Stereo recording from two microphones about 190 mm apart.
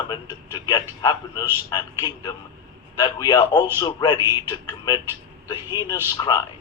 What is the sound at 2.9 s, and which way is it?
A man's voice, 20° left (ahead or behind).